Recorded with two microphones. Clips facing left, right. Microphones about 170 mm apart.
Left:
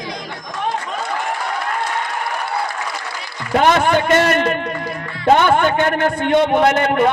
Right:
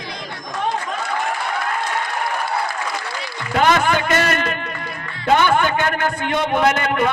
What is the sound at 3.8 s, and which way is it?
A man's voice, 25° left (ahead or behind).